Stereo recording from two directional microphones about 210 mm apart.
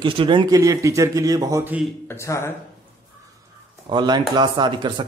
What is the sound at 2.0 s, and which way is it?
Speech, 15° left (ahead or behind).